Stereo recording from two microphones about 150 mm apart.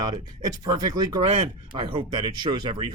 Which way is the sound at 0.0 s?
30° right (ahead or behind).